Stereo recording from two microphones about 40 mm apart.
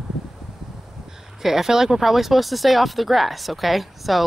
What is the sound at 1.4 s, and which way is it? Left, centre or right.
Speech, centre.